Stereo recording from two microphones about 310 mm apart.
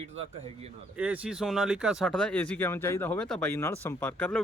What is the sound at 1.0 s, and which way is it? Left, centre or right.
Speech, centre.